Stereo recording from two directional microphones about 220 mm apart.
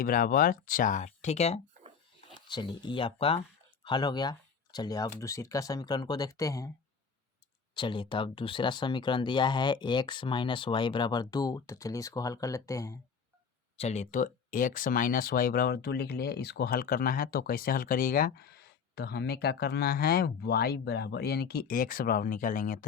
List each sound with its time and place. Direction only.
0.0 s speech: 40° left (ahead or behind); by 6.7 s 15° left (ahead or behind)
7.7 s speech: 20° left (ahead or behind)
13.7 s speech: 30° left (ahead or behind)